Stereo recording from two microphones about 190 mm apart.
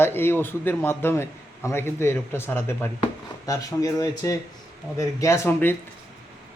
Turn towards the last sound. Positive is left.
turn(degrees=15)  # may be behind; listen again after turning